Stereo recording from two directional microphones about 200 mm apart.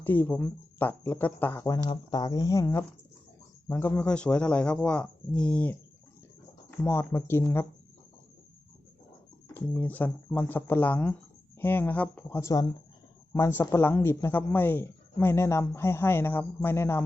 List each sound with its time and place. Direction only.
0.0 s speech: 10° left (ahead or behind)
9.6 s speech: 10° left (ahead or behind)